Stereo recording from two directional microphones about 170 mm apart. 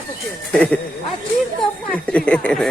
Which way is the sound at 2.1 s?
5° left (ahead or behind).